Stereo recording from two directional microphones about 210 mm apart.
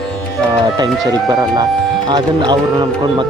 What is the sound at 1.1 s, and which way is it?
Speech, 20° right (ahead or behind).